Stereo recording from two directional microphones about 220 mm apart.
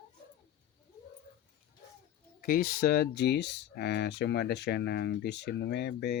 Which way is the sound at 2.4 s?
45° left (ahead or behind).